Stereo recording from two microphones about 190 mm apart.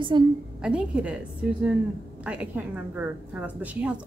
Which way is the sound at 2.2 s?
5° right (ahead or behind).